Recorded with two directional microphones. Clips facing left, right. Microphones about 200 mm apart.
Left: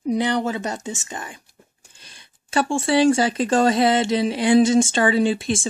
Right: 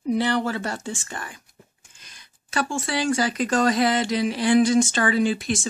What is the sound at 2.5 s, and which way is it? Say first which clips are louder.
Speech: left 7 dB; 30° left (ahead or behind).